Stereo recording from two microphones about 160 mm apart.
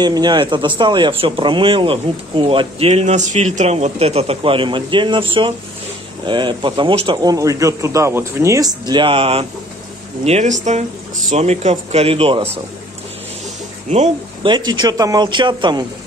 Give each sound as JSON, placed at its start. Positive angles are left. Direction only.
{"t": 0.0, "sound": "speech", "side_deg": -25}
{"t": 13.8, "sound": "speech", "side_deg": -45}
{"t": 14.5, "sound": "speech", "side_deg": -25}